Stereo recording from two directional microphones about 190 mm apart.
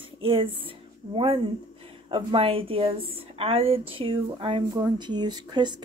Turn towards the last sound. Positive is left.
turn(degrees=-25)  # may be behind; listen again after turning